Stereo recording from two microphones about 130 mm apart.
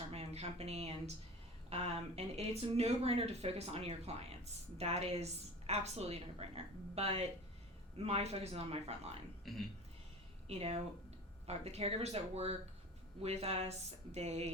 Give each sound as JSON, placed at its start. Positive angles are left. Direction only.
{"t": 0.1, "sound": "speech", "side_deg": -50}
{"t": 9.4, "sound": "speech", "side_deg": 0}
{"t": 10.5, "sound": "a woman's voice", "side_deg": -55}